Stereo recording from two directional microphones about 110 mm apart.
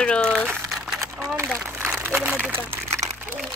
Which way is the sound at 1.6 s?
25° right (ahead or behind).